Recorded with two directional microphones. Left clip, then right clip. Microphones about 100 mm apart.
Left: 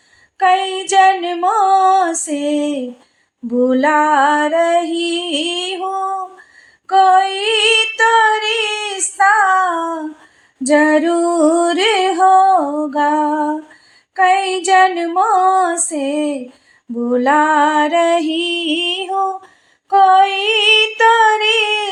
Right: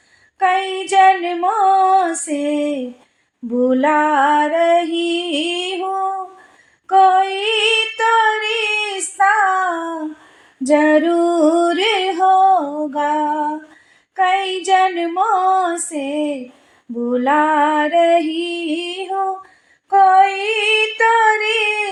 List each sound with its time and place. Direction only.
0.3 s female singing: 30° left (ahead or behind)
10.7 s music: 30° left (ahead or behind)